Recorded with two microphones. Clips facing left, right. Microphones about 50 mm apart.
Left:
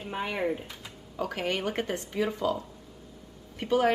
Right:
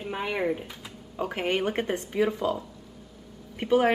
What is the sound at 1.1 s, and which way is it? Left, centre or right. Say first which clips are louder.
Speech: right 3 dB; right.